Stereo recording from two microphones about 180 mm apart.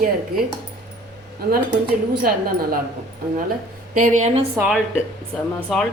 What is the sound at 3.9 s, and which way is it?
Speech, 45° right (ahead or behind).